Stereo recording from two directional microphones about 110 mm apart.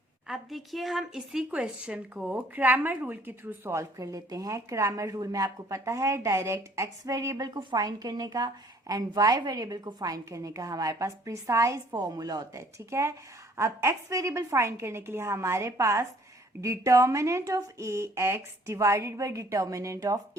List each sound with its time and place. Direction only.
0.3 s a woman's voice: centre (ahead or behind); by 20.1 s 30° right (ahead or behind)